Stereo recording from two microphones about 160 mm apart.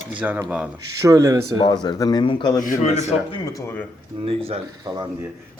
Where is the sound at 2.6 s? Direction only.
50° left (ahead or behind).